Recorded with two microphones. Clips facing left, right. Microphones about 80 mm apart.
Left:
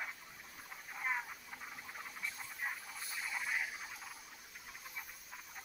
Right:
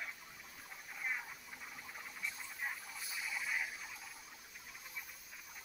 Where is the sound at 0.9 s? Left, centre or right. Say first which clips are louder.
Left 3 dB; left; by 3.0 s centre.